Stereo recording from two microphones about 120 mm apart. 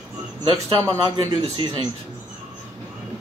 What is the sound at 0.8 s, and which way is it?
A man's voice, 35° right (ahead or behind).